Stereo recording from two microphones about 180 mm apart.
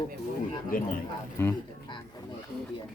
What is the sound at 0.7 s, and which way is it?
Speech, 50° left (ahead or behind).